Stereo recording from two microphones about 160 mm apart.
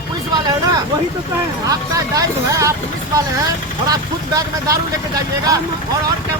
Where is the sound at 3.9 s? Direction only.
20° right (ahead or behind).